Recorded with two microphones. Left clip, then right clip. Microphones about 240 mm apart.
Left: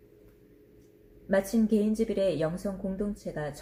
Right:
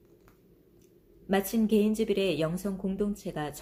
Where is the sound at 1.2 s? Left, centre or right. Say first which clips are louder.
Left 2 dB; right.